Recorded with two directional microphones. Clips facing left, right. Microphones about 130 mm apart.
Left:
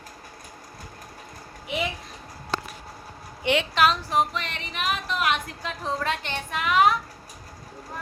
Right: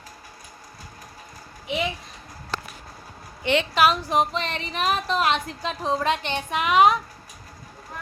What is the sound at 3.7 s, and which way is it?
Speech, 10° right (ahead or behind).